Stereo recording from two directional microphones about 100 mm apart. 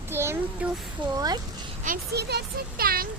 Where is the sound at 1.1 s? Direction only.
40° right (ahead or behind).